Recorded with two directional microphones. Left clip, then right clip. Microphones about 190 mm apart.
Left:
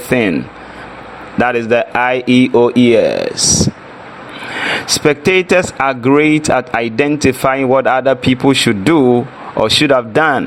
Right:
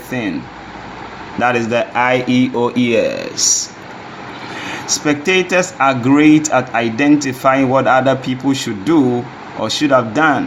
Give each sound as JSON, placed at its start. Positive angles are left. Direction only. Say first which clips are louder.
{"t": 0.1, "sound": "speech", "louder": "left 8 dB", "side_deg": 50}
{"t": 1.4, "sound": "speech", "louder": "left 2 dB", "side_deg": 50}
{"t": 4.6, "sound": "speech", "louder": "left 6 dB", "side_deg": 50}